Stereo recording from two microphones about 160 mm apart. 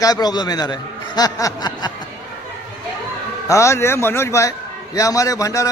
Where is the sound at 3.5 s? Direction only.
20° left (ahead or behind).